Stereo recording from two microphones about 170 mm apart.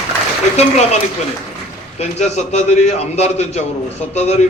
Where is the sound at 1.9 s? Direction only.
40° left (ahead or behind).